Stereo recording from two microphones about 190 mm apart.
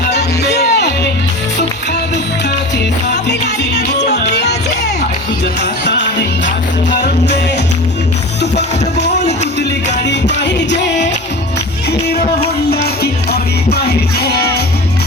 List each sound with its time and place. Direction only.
0.1 s music: 60° left (ahead or behind)
5.8 s music: 65° left (ahead or behind)
8.4 s music: 65° left (ahead or behind)
12.7 s music: 55° left (ahead or behind)